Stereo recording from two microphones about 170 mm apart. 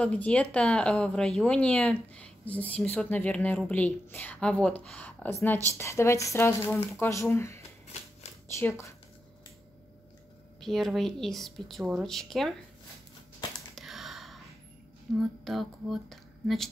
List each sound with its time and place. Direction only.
0.0 s speech: 5° left (ahead or behind)
10.6 s speech: centre (ahead or behind)
13.7 s a sound: centre (ahead or behind)
15.1 s speech: centre (ahead or behind)